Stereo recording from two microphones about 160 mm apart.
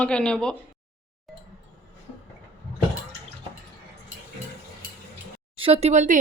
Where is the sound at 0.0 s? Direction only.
5° left (ahead or behind).